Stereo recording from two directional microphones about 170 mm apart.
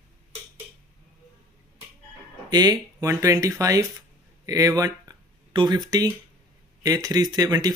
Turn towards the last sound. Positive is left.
turn(degrees=-20)  # may be behind; listen again after turning